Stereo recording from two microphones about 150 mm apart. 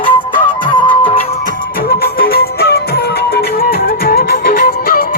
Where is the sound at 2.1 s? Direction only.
85° left.